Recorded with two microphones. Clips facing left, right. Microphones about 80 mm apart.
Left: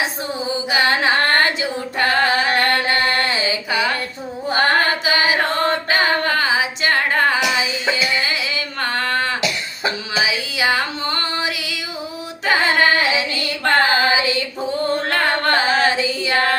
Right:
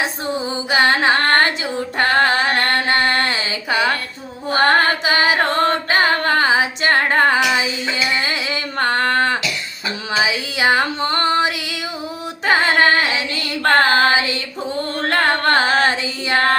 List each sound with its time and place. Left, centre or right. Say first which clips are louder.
0.7 s music: right 3 dB; right
4.5 s carnatic music: right 2 dB; right
10.2 s female singing: right 3 dB; right
15.1 s carnatic music: right 5 dB; right